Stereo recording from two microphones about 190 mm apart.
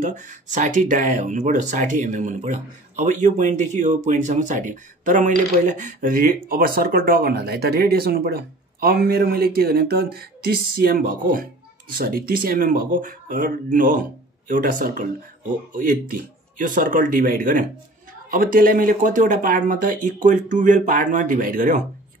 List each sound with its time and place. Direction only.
0.0 s speech: 40° right (ahead or behind)